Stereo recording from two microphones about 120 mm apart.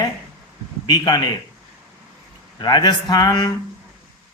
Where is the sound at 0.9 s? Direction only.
35° left (ahead or behind).